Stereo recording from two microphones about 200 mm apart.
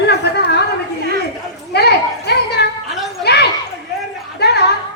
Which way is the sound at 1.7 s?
55° left (ahead or behind).